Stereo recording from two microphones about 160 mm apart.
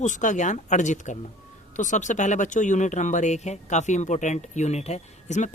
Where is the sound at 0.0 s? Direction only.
50° left (ahead or behind).